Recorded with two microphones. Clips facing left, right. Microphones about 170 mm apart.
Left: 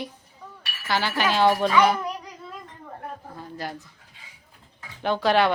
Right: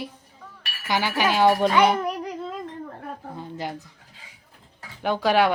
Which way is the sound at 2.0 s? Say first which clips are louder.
Right 5 dB; 60° right (ahead or behind).